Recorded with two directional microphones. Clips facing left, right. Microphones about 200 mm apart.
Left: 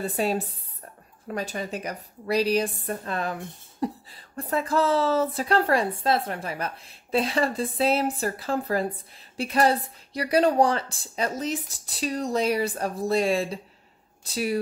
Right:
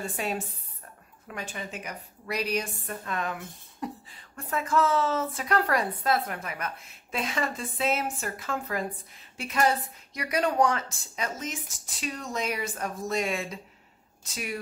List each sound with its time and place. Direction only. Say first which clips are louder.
0.0 s a woman's voice: left 6 dB; 35° left (ahead or behind)